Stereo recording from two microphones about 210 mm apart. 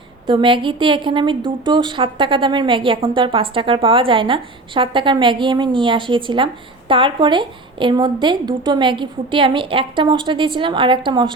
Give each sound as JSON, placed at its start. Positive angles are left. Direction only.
{"t": 0.3, "sound": "a woman's voice", "side_deg": -25}